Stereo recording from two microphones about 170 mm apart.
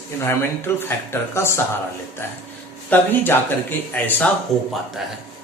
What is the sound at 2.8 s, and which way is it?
Speech, 10° left (ahead or behind).